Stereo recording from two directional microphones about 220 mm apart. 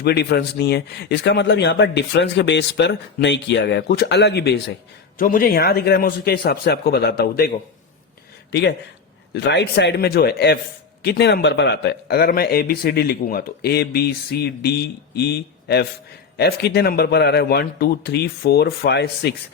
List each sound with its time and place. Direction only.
0.0 s a man's voice: 50° left (ahead or behind)
5.1 s a man's voice: 40° left (ahead or behind)
9.3 s a man's voice: 50° left (ahead or behind)